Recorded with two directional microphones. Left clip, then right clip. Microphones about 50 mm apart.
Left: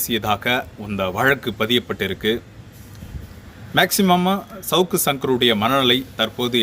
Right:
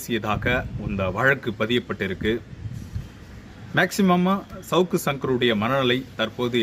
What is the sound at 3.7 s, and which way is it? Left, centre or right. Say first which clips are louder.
A man's voice: left 4 dB; right.